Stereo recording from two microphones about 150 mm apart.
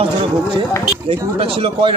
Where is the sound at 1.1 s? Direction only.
40° right (ahead or behind).